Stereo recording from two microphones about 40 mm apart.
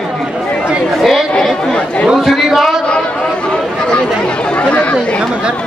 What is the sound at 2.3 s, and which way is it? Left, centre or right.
Speech, centre.